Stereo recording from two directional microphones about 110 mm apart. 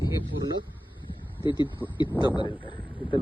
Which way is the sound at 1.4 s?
45° left (ahead or behind).